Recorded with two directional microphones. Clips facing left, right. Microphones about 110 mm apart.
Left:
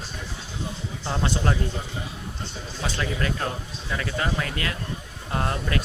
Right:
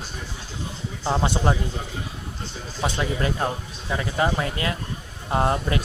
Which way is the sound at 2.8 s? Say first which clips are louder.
Right 3 dB; 20° right (ahead or behind).